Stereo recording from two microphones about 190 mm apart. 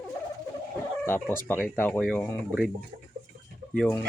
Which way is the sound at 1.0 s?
10° left (ahead or behind).